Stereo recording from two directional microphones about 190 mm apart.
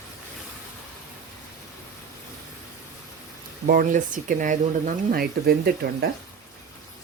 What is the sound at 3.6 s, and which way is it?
Speech, 50° right (ahead or behind).